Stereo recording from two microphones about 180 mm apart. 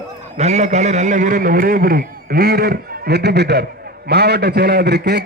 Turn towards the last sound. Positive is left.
turn(degrees=-65)  # may be behind; listen again after turning